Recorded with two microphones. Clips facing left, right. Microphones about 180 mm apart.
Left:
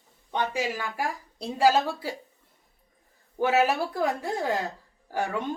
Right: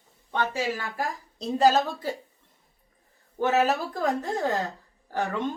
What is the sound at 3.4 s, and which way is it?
A woman's voice, 10° left (ahead or behind).